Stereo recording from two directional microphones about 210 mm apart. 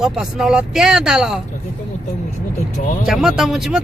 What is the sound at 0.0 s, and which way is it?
Speech, centre (ahead or behind).